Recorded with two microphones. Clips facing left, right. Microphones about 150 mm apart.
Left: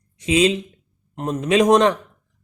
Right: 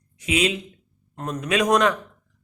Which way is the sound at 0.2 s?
30° left (ahead or behind).